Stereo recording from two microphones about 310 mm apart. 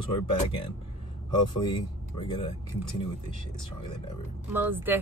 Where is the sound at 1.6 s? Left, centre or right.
Centre.